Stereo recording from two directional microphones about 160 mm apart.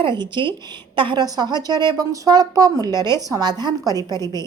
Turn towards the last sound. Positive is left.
turn(degrees=-25)  # may be behind; listen again after turning